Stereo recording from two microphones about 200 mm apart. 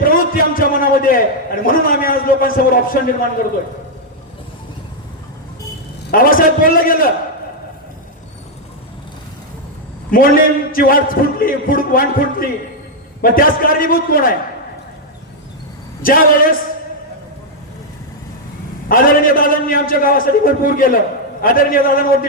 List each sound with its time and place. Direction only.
0.0 s a sound: 45° left (ahead or behind)
1.6 s a man's voice: 45° left (ahead or behind)
6.1 s a man's voice: 45° left (ahead or behind)
10.1 s a man's voice: 45° left (ahead or behind)
16.0 s a man's voice: 45° left (ahead or behind)
18.9 s a man's voice: 45° left (ahead or behind)